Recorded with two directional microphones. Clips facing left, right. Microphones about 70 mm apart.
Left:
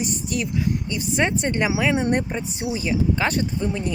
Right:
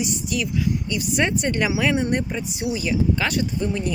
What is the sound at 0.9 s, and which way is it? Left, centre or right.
Speech, left.